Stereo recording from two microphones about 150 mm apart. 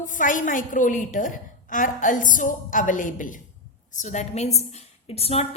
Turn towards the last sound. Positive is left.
turn(degrees=40)  # may be behind; listen again after turning